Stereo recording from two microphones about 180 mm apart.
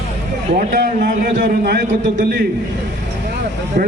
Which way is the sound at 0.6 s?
50° right (ahead or behind).